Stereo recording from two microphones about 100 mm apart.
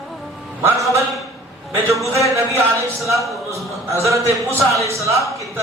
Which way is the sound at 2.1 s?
30° right (ahead or behind).